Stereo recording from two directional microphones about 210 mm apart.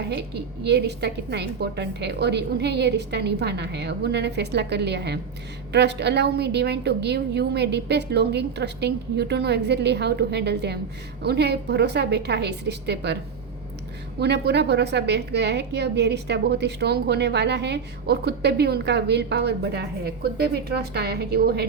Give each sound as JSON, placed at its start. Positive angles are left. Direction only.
{"t": 0.1, "sound": "a woman's voice", "side_deg": -50}
{"t": 14.2, "sound": "a woman's voice", "side_deg": -50}